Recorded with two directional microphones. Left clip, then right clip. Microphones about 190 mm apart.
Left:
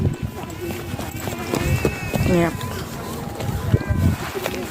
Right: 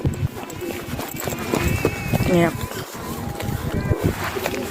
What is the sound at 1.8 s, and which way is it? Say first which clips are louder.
Run: left 1 dB; 25° right (ahead or behind).